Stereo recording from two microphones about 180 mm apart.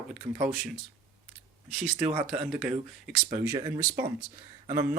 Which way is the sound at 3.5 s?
20° right (ahead or behind).